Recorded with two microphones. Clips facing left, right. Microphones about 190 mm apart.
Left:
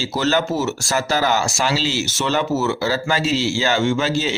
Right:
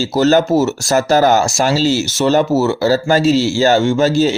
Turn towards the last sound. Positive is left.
turn(degrees=-40)  # may be behind; listen again after turning